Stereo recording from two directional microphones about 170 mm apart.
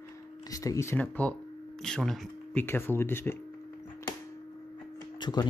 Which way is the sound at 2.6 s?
15° left (ahead or behind).